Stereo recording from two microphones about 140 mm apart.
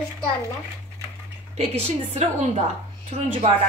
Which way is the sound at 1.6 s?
50° right (ahead or behind).